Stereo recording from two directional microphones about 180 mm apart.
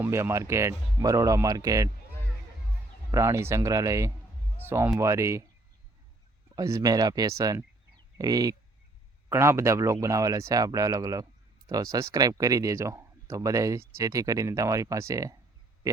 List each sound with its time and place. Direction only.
0.0 s speech: 15° right (ahead or behind)
3.1 s speech: 15° right (ahead or behind)
6.6 s speech: 20° right (ahead or behind)